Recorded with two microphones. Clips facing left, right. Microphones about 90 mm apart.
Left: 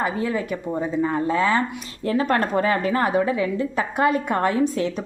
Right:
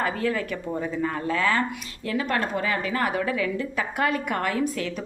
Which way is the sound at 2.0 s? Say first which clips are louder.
Left 5 dB; 35° left (ahead or behind).